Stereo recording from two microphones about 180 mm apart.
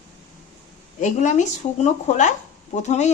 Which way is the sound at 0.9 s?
40° left (ahead or behind).